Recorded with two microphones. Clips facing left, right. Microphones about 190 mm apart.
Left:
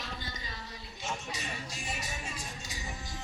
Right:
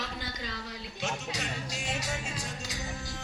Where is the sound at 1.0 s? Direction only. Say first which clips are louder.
Right 4 dB; 75° right (ahead or behind).